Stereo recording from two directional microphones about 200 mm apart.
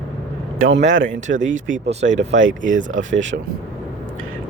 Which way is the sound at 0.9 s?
65° right (ahead or behind).